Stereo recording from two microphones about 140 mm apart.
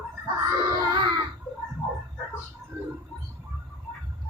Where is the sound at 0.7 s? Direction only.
35° right (ahead or behind).